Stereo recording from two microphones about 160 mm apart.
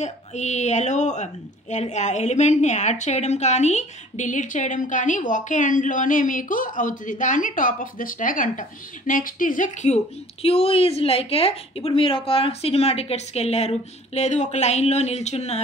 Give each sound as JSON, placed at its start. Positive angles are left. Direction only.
{"t": 0.0, "sound": "speech", "side_deg": 45}
{"t": 10.4, "sound": "a woman's voice", "side_deg": 40}